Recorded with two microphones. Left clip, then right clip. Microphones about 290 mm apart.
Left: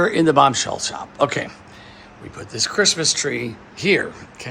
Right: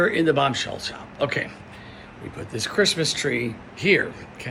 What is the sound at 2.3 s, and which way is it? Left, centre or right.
Speech, centre.